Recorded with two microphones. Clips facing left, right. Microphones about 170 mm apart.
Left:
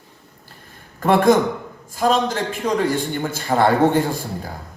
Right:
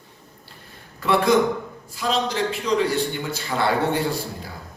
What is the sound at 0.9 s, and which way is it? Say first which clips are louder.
A man's voice: left 4 dB; 50° left (ahead or behind).